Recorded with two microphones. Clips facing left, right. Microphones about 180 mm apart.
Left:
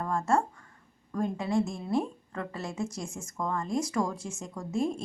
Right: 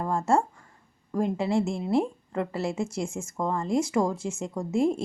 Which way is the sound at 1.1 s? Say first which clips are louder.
Right 3 dB; 25° right (ahead or behind).